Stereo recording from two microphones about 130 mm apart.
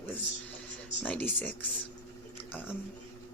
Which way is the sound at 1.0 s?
15° left (ahead or behind).